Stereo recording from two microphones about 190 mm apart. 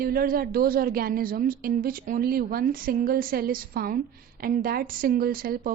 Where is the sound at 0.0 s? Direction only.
50° right (ahead or behind).